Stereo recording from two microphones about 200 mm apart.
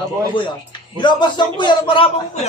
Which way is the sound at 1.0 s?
20° left (ahead or behind).